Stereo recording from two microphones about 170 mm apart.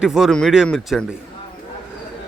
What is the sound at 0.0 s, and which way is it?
Speech, 5° right (ahead or behind).